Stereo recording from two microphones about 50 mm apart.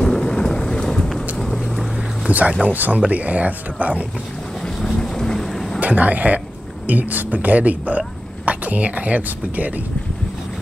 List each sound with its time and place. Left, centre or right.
0.0 s boat: centre
2.2 s speech: right
4.8 s boat: centre
5.8 s speech: right